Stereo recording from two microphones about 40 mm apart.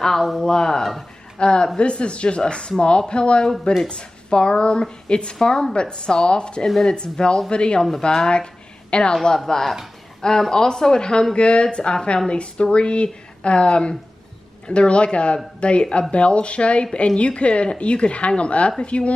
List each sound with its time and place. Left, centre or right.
0.4 s speech: centre